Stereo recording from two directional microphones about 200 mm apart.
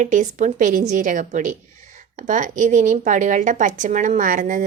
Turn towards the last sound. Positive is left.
turn(degrees=-40)  # may be behind; listen again after turning